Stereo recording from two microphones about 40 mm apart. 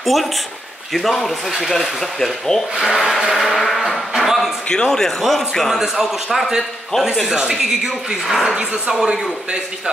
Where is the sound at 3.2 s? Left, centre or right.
Centre.